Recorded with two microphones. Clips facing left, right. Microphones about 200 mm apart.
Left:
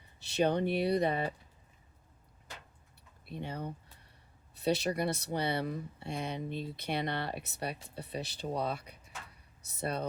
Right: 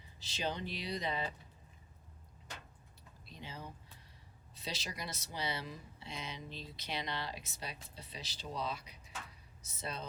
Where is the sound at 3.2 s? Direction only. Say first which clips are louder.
Left 9 dB; 60° left (ahead or behind).